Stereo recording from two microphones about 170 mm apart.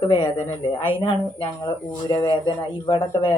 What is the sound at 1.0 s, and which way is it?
Speech, 30° left (ahead or behind).